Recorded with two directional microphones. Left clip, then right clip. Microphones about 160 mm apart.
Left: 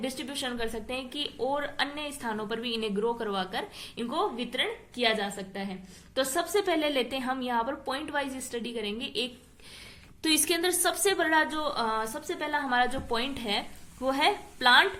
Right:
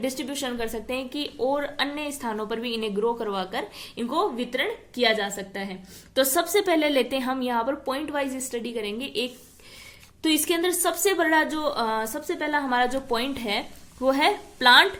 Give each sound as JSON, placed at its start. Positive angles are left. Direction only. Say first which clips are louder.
{"t": 0.0, "sound": "a woman's voice", "louder": "right 4 dB", "side_deg": -30}
{"t": 10.2, "sound": "a woman's voice", "louder": "right 3 dB", "side_deg": -20}